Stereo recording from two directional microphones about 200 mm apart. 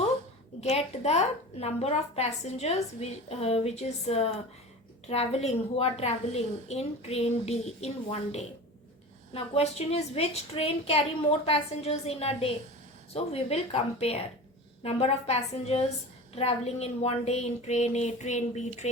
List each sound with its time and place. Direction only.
0.6 s a woman's voice: 30° left (ahead or behind)